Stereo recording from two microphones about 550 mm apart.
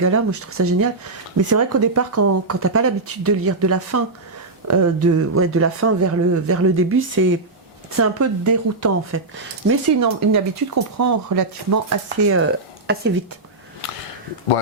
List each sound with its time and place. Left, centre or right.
0.0 s speech: right
12.0 s speech: right
13.8 s speech: left